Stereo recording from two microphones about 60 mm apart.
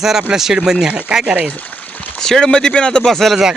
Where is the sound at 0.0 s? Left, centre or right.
Centre.